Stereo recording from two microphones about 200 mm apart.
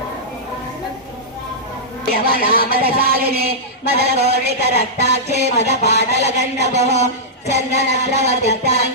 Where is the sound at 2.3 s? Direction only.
45° right (ahead or behind).